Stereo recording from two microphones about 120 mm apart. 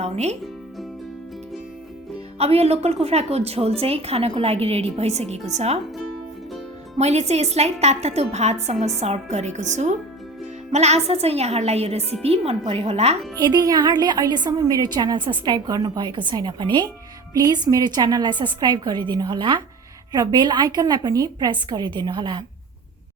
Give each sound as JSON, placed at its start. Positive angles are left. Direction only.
{"t": 0.0, "sound": "music", "side_deg": -65}
{"t": 2.4, "sound": "a woman's voice", "side_deg": -60}
{"t": 7.0, "sound": "a woman's voice", "side_deg": -65}
{"t": 10.7, "sound": "a woman's voice", "side_deg": -65}
{"t": 13.4, "sound": "a woman's voice", "side_deg": -30}